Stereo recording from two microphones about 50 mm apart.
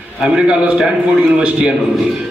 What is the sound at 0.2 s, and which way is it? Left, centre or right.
Speech, centre.